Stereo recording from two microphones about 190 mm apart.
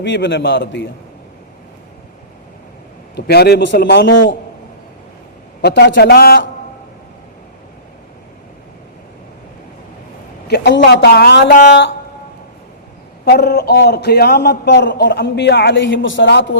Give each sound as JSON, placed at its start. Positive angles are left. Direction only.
{"t": 0.0, "sound": "a man's voice", "side_deg": 70}
{"t": 3.2, "sound": "a man's voice", "side_deg": 60}
{"t": 5.6, "sound": "a man's voice", "side_deg": 65}
{"t": 10.5, "sound": "a man's voice", "side_deg": 65}
{"t": 13.2, "sound": "a man's voice", "side_deg": 55}